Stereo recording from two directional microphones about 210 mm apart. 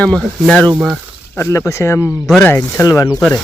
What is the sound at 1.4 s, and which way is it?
Speech, 15° left (ahead or behind).